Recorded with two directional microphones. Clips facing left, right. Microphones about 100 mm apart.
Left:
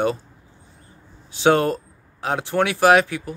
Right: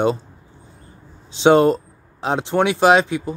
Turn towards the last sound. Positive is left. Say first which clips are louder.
# right 1 dB
turn(degrees=-20)  # may be behind; listen again after turning